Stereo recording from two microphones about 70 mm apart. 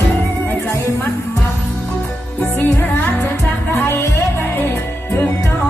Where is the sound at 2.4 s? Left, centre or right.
Left.